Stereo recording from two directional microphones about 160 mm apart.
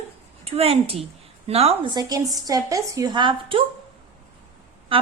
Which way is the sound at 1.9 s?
25° right (ahead or behind).